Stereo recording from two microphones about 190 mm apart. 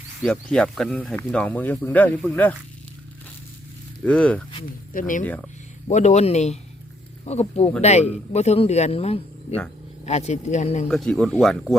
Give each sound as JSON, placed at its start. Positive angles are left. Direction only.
{"t": 0.2, "sound": "speech", "side_deg": 5}
{"t": 4.0, "sound": "speech", "side_deg": 5}
{"t": 4.9, "sound": "speech", "side_deg": 45}
{"t": 5.2, "sound": "speech", "side_deg": 10}
{"t": 5.9, "sound": "a man's voice", "side_deg": 40}
{"t": 10.8, "sound": "speech", "side_deg": 5}